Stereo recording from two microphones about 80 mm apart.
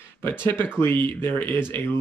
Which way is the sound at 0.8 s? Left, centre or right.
Left.